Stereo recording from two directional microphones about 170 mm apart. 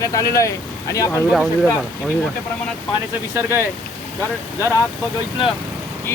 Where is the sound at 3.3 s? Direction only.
15° right (ahead or behind).